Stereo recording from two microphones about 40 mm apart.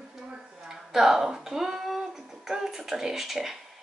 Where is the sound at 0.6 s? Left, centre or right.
Centre.